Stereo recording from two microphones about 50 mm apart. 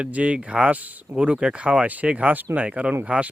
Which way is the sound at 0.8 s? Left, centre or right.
Right.